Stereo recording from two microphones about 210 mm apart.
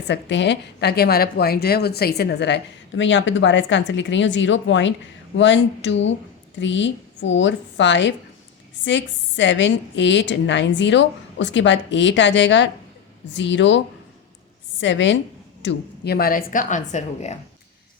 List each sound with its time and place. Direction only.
0.1 s a woman's voice: 55° left (ahead or behind)
15.6 s a woman's voice: 50° left (ahead or behind)